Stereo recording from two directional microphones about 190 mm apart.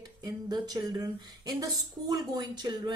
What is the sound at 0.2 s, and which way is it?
Speech, 20° right (ahead or behind).